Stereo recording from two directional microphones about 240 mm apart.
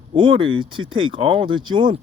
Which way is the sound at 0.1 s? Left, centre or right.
Right.